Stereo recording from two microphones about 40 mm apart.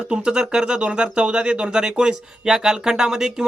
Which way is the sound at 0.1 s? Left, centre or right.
Right.